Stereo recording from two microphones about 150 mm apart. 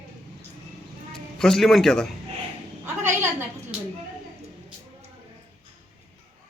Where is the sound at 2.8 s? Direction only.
15° right (ahead or behind).